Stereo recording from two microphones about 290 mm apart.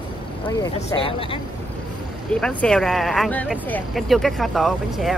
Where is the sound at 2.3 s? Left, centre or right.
Centre.